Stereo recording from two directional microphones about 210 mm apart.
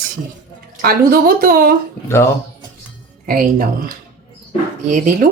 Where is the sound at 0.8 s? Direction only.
45° right (ahead or behind).